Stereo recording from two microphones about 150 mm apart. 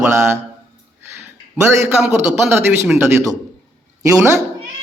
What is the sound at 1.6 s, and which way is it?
Speech, 15° right (ahead or behind).